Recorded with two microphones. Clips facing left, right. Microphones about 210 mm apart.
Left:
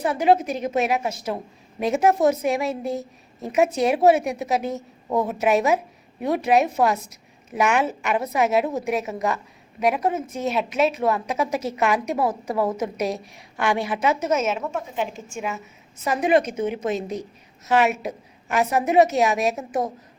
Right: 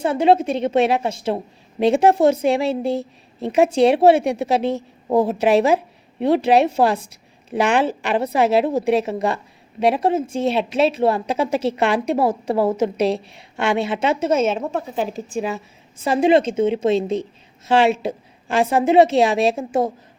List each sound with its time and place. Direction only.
0.0 s a woman's voice: 30° right (ahead or behind)